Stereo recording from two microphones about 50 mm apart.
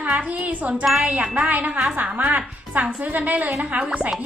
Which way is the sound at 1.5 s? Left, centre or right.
Right.